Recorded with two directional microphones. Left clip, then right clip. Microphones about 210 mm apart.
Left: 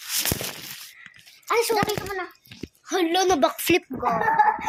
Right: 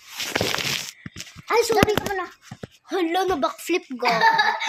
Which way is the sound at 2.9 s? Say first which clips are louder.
Left 1 dB; centre (ahead or behind).